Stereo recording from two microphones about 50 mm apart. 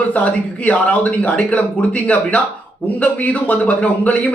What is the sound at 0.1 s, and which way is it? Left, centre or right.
A man's voice, left.